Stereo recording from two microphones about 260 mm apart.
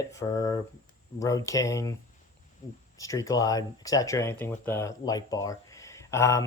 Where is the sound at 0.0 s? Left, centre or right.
Centre.